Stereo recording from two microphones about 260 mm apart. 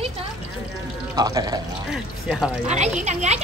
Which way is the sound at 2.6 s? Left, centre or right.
Right.